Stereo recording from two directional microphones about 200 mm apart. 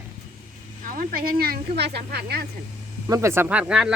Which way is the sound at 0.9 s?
45° right (ahead or behind).